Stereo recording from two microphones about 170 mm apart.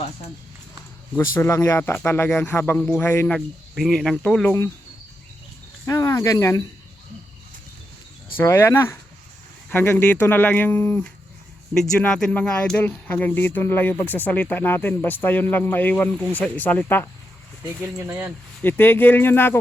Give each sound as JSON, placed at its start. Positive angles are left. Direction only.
{"t": 1.1, "sound": "speech", "side_deg": 15}
{"t": 5.8, "sound": "speech", "side_deg": 20}
{"t": 8.4, "sound": "speech", "side_deg": 15}
{"t": 18.1, "sound": "speech", "side_deg": -10}
{"t": 18.6, "sound": "speech", "side_deg": 10}